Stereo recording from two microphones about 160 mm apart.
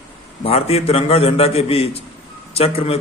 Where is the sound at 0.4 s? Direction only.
40° left (ahead or behind).